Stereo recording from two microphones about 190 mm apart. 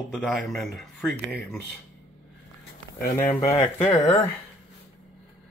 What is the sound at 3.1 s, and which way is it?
Speech, 45° left (ahead or behind).